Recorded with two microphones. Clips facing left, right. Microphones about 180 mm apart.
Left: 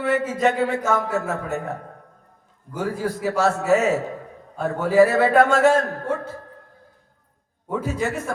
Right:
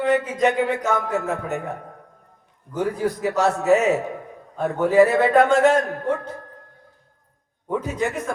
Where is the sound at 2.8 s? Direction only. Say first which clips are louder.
Right 2 dB; 20° right (ahead or behind).